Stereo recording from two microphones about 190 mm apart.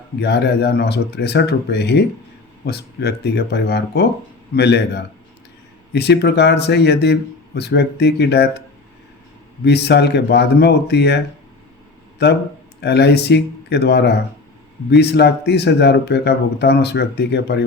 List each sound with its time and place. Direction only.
0.2 s speech: 60° left (ahead or behind)
5.9 s speech: 60° left (ahead or behind)
9.6 s speech: 60° left (ahead or behind)
12.2 s speech: 60° left (ahead or behind)